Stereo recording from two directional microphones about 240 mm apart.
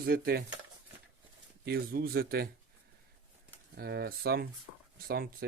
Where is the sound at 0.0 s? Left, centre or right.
Right.